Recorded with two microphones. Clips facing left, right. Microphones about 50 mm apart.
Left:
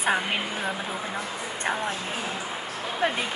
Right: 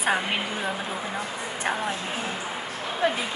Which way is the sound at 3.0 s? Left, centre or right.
Left.